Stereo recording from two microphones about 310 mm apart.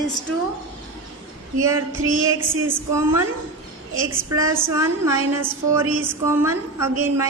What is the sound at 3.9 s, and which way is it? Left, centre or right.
Speech, right.